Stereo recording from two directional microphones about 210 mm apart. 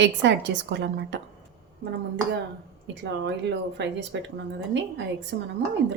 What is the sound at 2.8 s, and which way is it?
A woman's voice, 55° right (ahead or behind).